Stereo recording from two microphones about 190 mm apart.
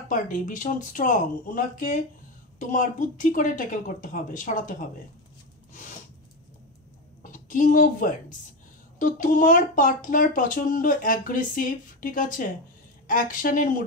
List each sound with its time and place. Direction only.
0.1 s speech: 45° left (ahead or behind)
7.2 s a woman's voice: 45° left (ahead or behind)